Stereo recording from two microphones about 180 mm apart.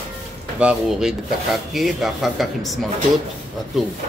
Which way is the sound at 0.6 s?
5° right (ahead or behind).